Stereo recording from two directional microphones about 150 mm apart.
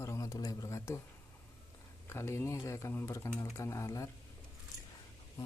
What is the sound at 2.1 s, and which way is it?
Speech, 15° left (ahead or behind).